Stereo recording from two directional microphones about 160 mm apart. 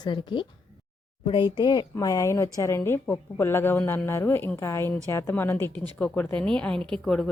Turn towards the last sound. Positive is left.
turn(degrees=5)  # may be behind; listen again after turning